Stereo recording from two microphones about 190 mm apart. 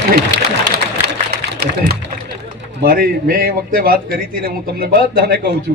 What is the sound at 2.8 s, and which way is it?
A man's voice, 50° right (ahead or behind).